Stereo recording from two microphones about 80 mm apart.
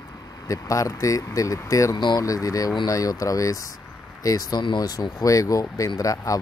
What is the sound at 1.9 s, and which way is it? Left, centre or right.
Speech, left.